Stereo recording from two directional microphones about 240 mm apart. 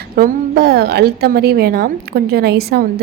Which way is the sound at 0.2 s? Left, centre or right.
Right.